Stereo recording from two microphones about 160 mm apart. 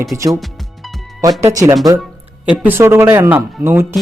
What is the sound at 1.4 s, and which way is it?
Speech, 15° right (ahead or behind).